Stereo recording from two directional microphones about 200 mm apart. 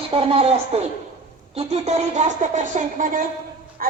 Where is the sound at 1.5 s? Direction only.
30° right (ahead or behind).